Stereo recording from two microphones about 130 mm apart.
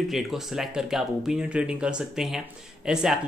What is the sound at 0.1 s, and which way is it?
Speech, centre (ahead or behind).